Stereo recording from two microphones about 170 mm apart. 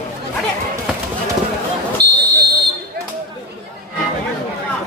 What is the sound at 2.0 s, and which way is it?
Buzzer, 75° right (ahead or behind).